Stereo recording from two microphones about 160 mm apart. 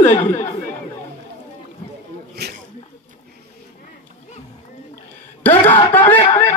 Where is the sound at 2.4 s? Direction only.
90° right.